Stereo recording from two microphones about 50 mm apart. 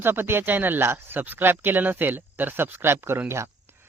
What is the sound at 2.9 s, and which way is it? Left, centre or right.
Speech, right.